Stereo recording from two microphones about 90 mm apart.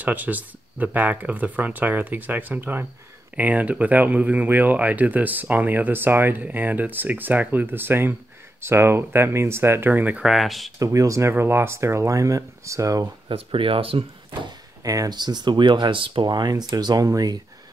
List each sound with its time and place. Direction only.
0.0 s speech: 20° right (ahead or behind)
10.2 s speech: centre (ahead or behind)
10.8 s speech: 35° right (ahead or behind)
13.3 s speech: 80° right
14.8 s speech: 40° right (ahead or behind)